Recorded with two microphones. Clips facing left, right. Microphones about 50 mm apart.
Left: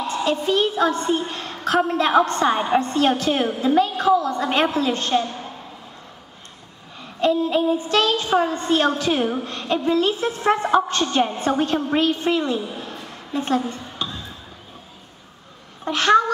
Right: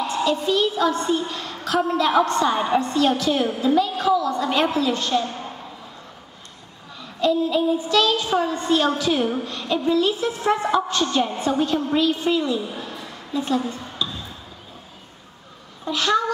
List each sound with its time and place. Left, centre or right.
0.0 s a woman's voice: left
7.0 s a woman's voice: left
12.8 s a sound: left
15.8 s speech: left